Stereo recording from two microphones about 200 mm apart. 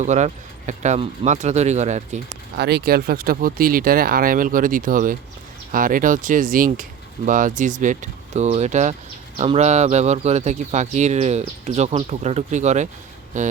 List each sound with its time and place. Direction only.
0.0 s speech: 35° right (ahead or behind)
2.6 s speech: 55° right (ahead or behind); by 13.5 s 40° right (ahead or behind)